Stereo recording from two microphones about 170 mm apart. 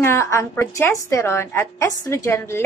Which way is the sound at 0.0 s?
15° left (ahead or behind).